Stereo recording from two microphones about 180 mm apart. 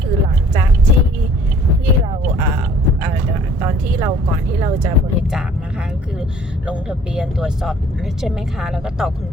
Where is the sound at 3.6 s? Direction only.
15° right (ahead or behind).